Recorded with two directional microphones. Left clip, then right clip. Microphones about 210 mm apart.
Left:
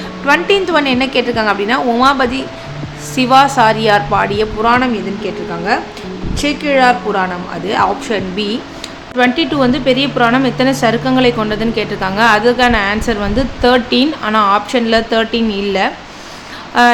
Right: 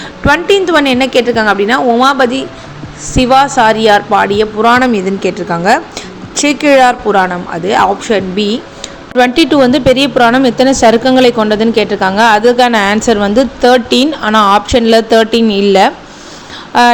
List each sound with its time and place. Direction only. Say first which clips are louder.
0.3 s a woman's voice: right 3 dB; 20° right (ahead or behind)